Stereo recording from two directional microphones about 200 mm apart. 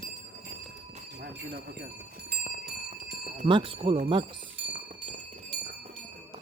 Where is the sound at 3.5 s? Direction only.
25° right (ahead or behind).